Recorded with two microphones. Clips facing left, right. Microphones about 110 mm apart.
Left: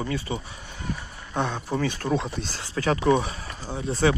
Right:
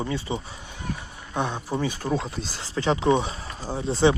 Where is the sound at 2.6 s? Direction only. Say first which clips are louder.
Right 1 dB; 30° right (ahead or behind).